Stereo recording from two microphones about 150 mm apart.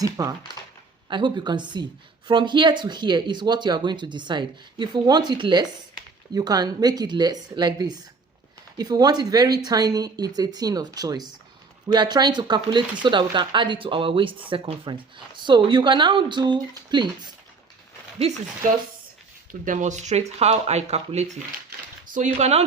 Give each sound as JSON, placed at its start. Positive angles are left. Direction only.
{"t": 0.0, "sound": "speech", "side_deg": -20}
{"t": 18.6, "sound": "speech", "side_deg": -65}